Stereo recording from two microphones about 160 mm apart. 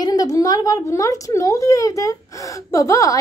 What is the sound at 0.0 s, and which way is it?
Speech, 25° left (ahead or behind).